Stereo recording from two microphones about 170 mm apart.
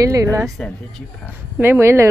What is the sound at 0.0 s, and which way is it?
Speech, 20° right (ahead or behind).